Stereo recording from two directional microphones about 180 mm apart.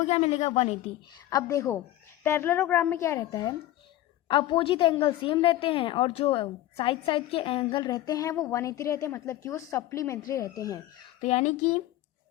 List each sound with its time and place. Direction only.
0.0 s a woman's voice: 35° left (ahead or behind)
1.3 s a woman's voice: 20° left (ahead or behind)
11.2 s a woman's voice: 35° left (ahead or behind)